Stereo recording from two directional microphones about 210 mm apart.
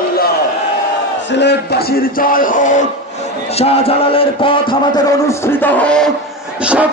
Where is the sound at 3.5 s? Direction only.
30° left (ahead or behind).